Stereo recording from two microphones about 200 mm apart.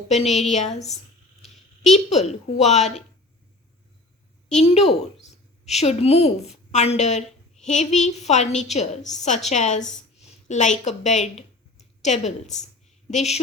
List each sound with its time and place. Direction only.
0.5 s a woman's voice: 35° left (ahead or behind)
1.9 s a woman's voice: 35° left (ahead or behind)
4.4 s a woman's voice: 35° left (ahead or behind)